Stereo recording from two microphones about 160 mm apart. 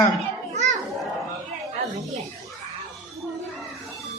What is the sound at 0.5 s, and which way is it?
Children playing, 45° right (ahead or behind).